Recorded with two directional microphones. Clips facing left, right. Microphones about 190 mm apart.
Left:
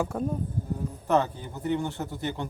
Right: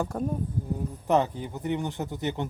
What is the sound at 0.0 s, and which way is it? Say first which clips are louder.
Speech: left 1 dB; centre (ahead or behind).